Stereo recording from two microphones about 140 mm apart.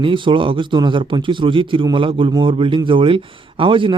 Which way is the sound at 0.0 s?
35° right (ahead or behind).